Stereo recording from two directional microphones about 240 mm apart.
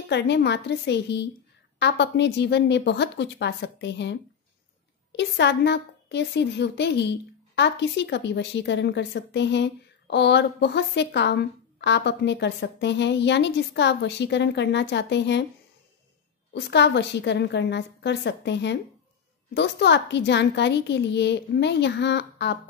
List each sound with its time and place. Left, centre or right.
0.1 s a woman's voice: left
16.5 s a woman's voice: left